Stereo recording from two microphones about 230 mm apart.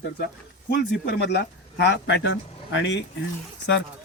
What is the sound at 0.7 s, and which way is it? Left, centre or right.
Speech, left.